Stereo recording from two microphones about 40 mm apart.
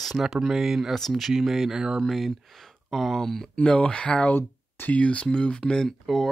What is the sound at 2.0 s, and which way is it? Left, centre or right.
Speech, centre.